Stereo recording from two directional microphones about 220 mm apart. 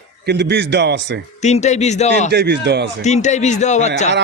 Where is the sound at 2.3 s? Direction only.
50° right (ahead or behind).